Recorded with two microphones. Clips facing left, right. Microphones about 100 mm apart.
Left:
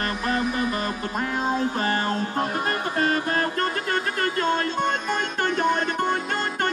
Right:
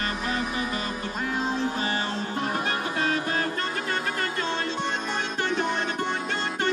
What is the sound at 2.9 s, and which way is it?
Music, 50° left (ahead or behind).